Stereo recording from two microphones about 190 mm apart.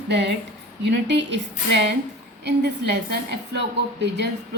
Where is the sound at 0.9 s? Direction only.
65° right (ahead or behind).